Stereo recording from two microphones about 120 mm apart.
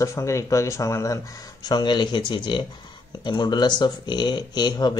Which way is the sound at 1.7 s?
40° left (ahead or behind).